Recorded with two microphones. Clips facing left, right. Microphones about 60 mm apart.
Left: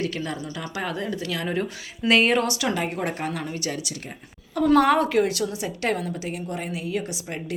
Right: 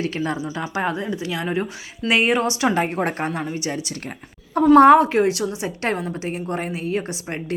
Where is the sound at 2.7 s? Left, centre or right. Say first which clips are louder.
Right 5 dB; right.